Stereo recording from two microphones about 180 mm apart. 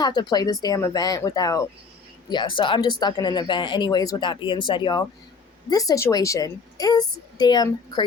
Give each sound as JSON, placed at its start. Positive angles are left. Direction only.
{"t": 0.0, "sound": "speech", "side_deg": 25}